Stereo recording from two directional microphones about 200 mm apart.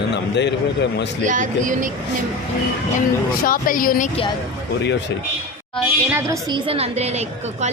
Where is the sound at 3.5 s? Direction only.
45° left (ahead or behind).